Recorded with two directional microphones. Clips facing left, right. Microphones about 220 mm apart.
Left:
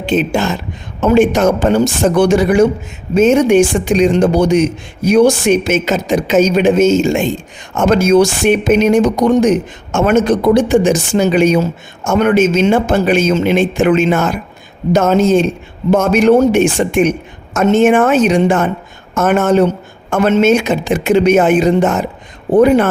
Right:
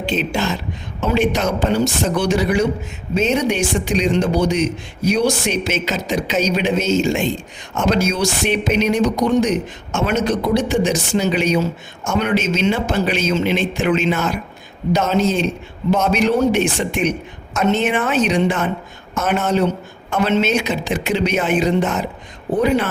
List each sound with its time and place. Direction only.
0.0 s a man's voice: 50° left (ahead or behind)